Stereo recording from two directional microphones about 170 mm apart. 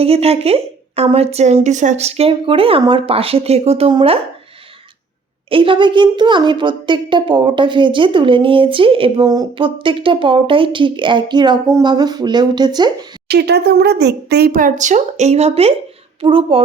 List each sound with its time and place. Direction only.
0.0 s a woman's voice: 35° right (ahead or behind)
5.5 s a woman's voice: 30° right (ahead or behind)
13.2 s a woman's voice: 75° right (ahead or behind); by 16.6 s 30° right (ahead or behind)